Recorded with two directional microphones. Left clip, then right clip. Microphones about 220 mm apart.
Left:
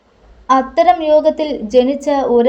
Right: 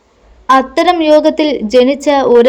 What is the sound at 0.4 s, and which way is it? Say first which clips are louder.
A woman's voice: right 2 dB; 35° right (ahead or behind).